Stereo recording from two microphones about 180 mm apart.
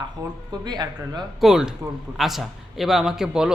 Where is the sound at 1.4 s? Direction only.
5° right (ahead or behind).